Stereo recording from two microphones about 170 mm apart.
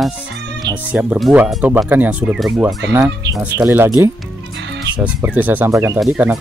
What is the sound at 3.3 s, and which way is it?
Speech, 20° right (ahead or behind).